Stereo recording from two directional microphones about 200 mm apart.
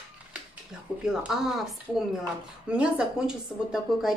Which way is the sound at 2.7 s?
5° right (ahead or behind).